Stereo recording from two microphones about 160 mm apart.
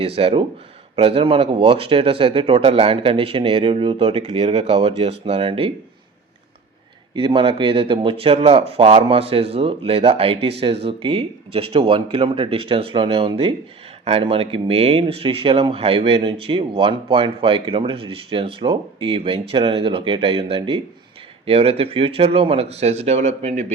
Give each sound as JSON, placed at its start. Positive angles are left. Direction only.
{"t": 0.0, "sound": "speech", "side_deg": -35}
{"t": 7.2, "sound": "speech", "side_deg": -30}